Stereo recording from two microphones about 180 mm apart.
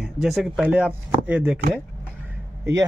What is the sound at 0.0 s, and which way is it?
Speech, centre (ahead or behind).